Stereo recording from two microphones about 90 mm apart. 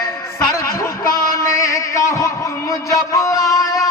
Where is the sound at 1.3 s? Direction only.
35° left (ahead or behind).